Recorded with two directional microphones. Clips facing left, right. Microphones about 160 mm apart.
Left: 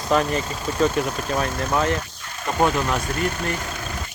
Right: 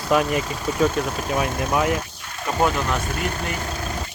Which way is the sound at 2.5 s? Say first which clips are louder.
Left 1 dB; centre (ahead or behind).